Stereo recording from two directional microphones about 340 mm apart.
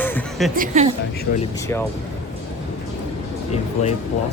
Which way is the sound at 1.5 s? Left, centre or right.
Centre.